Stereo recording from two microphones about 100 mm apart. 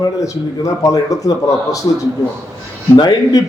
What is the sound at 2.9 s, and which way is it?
Speech, 45° left (ahead or behind).